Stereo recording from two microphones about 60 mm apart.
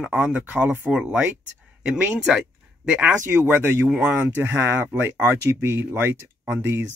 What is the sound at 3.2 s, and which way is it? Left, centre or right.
Speech, right.